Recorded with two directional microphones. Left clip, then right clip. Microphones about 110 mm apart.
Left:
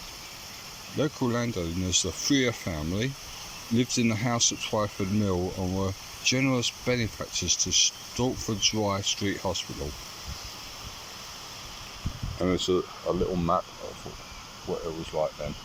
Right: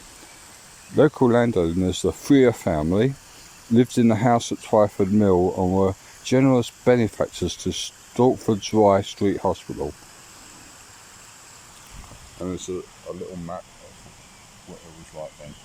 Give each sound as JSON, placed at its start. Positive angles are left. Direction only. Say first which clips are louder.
{"t": 0.9, "sound": "speech", "louder": "right 12 dB", "side_deg": -90}
{"t": 12.4, "sound": "speech", "louder": "left 4 dB", "side_deg": -25}
{"t": 13.1, "sound": "speech", "louder": "left 7 dB", "side_deg": -5}
{"t": 14.7, "sound": "speech", "louder": "left 12 dB", "side_deg": -10}